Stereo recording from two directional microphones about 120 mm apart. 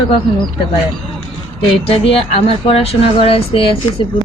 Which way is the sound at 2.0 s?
55° left (ahead or behind).